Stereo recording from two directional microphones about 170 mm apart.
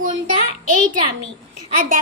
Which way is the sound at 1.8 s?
55° right (ahead or behind).